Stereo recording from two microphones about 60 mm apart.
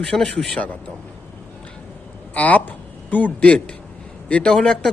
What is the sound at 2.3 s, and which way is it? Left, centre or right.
A man's voice, left.